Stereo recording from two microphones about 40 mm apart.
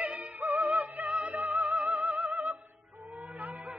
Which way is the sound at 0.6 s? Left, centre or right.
Right.